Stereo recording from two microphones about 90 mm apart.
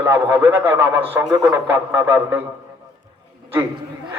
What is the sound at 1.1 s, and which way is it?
Speech, 40° right (ahead or behind).